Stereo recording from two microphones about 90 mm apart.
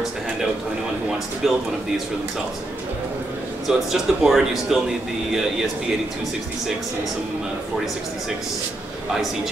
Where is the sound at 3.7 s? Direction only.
5° right (ahead or behind).